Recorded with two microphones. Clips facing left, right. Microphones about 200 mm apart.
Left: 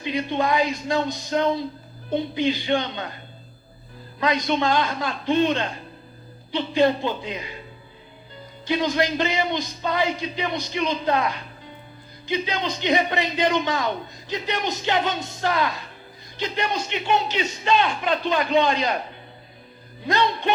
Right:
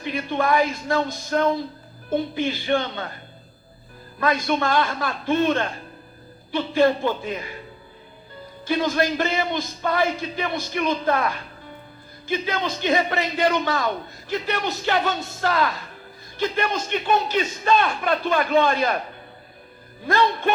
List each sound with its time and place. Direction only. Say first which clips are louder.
0.0 s a man's voice: even; 20° left (ahead or behind)
4.2 s a man's voice: even; 15° left (ahead or behind)
8.6 s a man's voice: right 1 dB; 20° left (ahead or behind)
16.9 s speech: right 3 dB; 50° right (ahead or behind)
17.7 s a man's voice: even; 20° left (ahead or behind)
20.1 s a man's voice: right 2 dB; 20° left (ahead or behind)